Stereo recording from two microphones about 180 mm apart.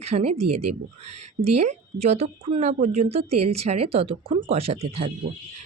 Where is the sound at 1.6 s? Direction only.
40° right (ahead or behind).